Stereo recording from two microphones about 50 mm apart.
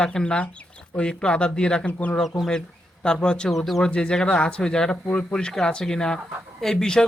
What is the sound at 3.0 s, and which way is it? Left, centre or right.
Speech, centre.